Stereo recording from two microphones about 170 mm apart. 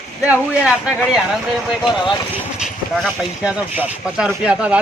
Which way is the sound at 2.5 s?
Centre (ahead or behind).